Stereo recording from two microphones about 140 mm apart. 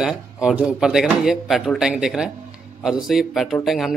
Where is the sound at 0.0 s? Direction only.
5° right (ahead or behind).